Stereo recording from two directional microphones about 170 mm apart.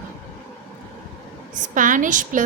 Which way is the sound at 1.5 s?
50° right (ahead or behind).